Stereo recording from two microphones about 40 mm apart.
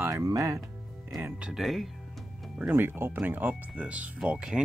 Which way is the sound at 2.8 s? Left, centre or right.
Right.